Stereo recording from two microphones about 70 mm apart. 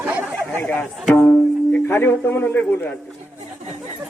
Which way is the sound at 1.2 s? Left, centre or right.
Left.